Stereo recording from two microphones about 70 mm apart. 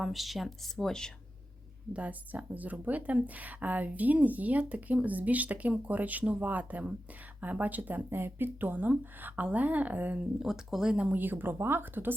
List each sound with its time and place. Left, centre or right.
0.0 s speech: centre
1.9 s speech: centre
10.4 s speech: centre
10.9 s speech: centre